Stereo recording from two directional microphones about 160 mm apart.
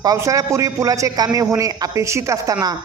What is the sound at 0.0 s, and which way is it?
A man's voice, 20° right (ahead or behind).